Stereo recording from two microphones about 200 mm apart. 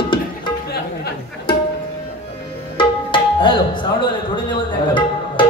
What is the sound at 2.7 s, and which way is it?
Music, 25° left (ahead or behind).